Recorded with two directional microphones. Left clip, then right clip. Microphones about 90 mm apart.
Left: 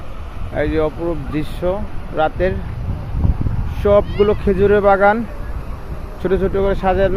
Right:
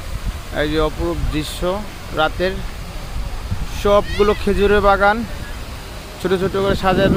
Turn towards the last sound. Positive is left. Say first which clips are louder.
# even
turn(degrees=-10)  # may be behind; listen again after turning